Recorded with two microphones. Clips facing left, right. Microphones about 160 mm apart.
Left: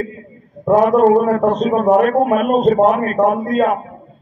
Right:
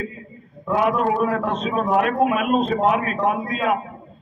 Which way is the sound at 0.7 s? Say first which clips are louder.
Left 9 dB; 40° left (ahead or behind).